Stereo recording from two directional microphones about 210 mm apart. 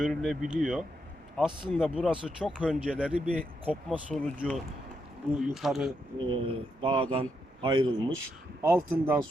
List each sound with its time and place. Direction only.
0.0 s speech: centre (ahead or behind)
6.1 s speech: 25° right (ahead or behind)
8.6 s speech: 10° right (ahead or behind)